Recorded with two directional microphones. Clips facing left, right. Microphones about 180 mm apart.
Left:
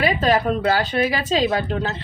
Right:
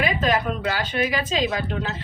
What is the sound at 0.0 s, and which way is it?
Speech, 35° left (ahead or behind).